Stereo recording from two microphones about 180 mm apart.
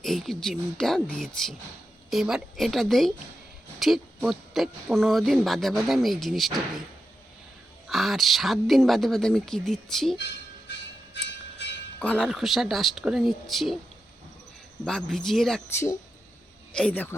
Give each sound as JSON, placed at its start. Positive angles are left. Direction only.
{"t": 0.0, "sound": "speech", "side_deg": 0}
{"t": 7.9, "sound": "speech", "side_deg": 0}
{"t": 11.9, "sound": "speech", "side_deg": 5}
{"t": 14.8, "sound": "speech", "side_deg": 0}
{"t": 15.7, "sound": "speech", "side_deg": 15}